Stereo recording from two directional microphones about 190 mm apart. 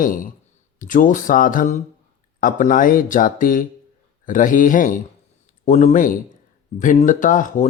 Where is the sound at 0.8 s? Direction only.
45° left (ahead or behind).